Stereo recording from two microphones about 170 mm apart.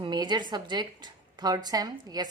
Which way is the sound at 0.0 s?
25° right (ahead or behind).